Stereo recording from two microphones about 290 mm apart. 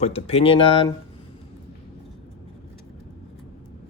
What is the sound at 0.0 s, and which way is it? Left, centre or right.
Speech, left.